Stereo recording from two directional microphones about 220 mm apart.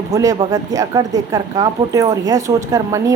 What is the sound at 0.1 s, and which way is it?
Speech, 15° right (ahead or behind).